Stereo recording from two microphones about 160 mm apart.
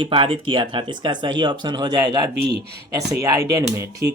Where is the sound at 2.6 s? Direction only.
90° right.